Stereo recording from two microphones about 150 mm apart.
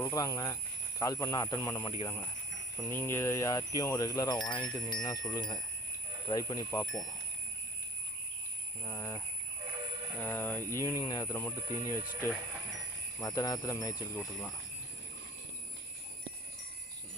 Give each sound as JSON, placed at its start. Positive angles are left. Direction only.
{"t": 0.0, "sound": "speech", "side_deg": 25}
{"t": 8.8, "sound": "speech", "side_deg": 20}